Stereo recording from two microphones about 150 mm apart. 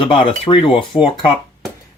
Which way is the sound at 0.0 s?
35° left (ahead or behind).